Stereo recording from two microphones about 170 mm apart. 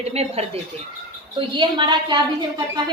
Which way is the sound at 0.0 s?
40° right (ahead or behind).